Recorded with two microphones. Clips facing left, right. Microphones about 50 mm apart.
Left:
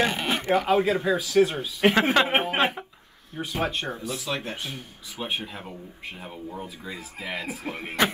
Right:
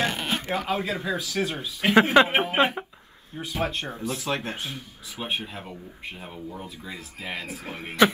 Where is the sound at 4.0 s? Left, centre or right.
Right.